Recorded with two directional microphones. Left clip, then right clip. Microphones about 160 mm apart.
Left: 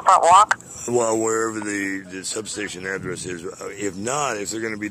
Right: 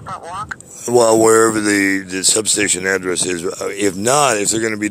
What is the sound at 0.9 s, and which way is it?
Speech, 25° right (ahead or behind).